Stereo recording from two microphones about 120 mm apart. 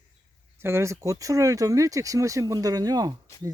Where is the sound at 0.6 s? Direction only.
20° right (ahead or behind).